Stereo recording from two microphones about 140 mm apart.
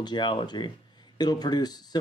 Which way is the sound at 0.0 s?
30° left (ahead or behind).